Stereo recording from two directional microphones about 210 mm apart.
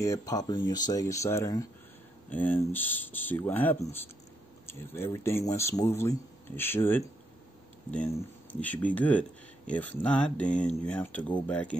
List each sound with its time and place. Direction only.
0.0 s speech: 15° left (ahead or behind)
8.5 s speech: 5° left (ahead or behind)